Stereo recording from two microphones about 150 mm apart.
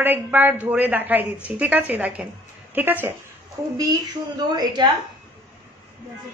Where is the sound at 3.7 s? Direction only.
25° right (ahead or behind).